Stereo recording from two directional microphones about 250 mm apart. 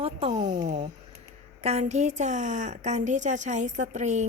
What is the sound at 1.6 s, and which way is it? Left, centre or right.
Speech, right.